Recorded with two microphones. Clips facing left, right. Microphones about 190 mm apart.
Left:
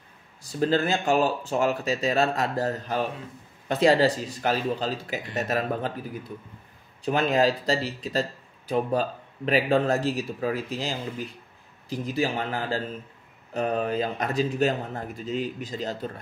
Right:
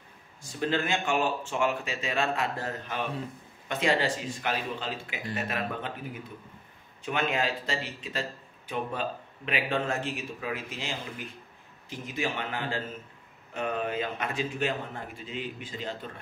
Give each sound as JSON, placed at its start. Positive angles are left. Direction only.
{"t": 0.4, "sound": "speech", "side_deg": 35}
{"t": 7.1, "sound": "speech", "side_deg": 35}